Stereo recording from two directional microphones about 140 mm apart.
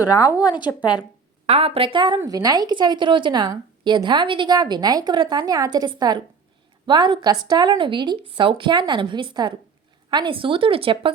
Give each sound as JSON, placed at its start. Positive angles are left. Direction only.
{"t": 0.4, "sound": "a woman's voice", "side_deg": 30}
{"t": 1.5, "sound": "speech", "side_deg": -45}